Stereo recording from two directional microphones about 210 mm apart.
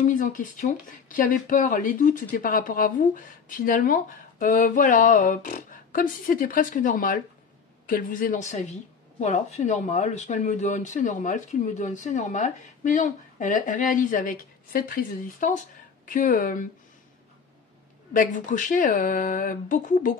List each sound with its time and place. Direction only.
0.0 s speech: 40° left (ahead or behind)
18.1 s speech: 40° left (ahead or behind)